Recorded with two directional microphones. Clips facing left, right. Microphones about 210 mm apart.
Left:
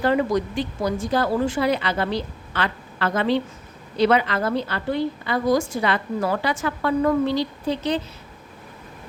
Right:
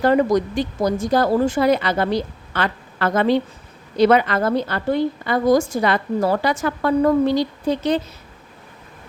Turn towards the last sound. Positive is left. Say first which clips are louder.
# right 4 dB
turn(degrees=-45)  # may be behind; listen again after turning